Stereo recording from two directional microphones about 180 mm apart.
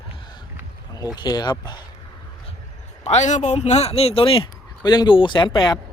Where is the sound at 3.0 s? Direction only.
40° left (ahead or behind); by 5.8 s 25° left (ahead or behind).